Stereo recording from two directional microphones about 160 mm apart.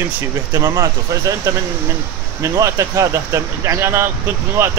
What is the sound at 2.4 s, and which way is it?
Speech, 20° right (ahead or behind).